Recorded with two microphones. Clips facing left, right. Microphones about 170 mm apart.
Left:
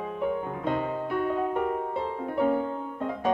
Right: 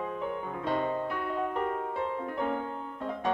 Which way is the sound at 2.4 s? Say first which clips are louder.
Left 9 dB; 10° left (ahead or behind).